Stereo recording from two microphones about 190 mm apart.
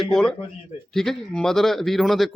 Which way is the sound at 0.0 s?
5° left (ahead or behind).